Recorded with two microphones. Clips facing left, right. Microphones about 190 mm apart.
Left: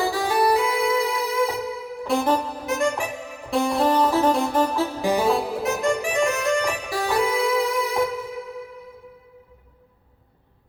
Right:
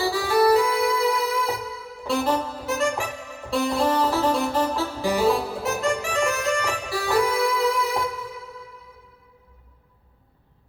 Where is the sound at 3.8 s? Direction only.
20° left (ahead or behind).